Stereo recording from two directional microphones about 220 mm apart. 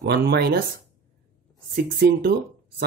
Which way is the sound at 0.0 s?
50° right (ahead or behind).